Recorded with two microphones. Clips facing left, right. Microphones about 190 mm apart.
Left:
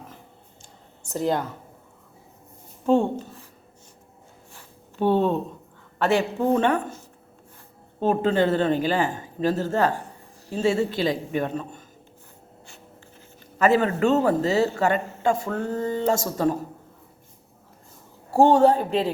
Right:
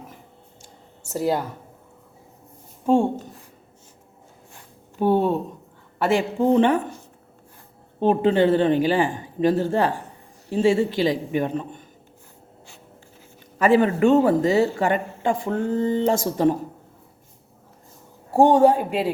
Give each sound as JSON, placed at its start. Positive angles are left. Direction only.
{"t": 0.6, "sound": "a sound", "side_deg": -10}
{"t": 2.8, "sound": "speech", "side_deg": -10}
{"t": 4.9, "sound": "speech", "side_deg": -10}
{"t": 8.0, "sound": "speech", "side_deg": -15}
{"t": 13.6, "sound": "speech", "side_deg": -15}
{"t": 18.3, "sound": "speech", "side_deg": -15}